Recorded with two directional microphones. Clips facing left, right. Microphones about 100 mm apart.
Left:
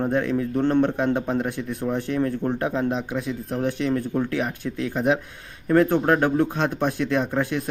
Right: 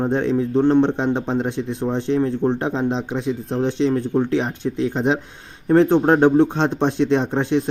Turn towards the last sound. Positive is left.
turn(degrees=-25)  # may be behind; listen again after turning